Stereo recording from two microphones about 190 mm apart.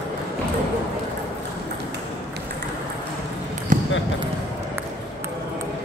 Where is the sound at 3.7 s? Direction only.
40° right (ahead or behind).